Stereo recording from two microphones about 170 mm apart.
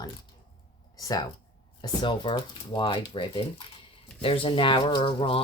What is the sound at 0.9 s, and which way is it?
Speech, 20° left (ahead or behind).